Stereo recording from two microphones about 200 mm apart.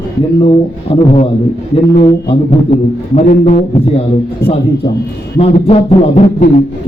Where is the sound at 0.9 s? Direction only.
30° left (ahead or behind).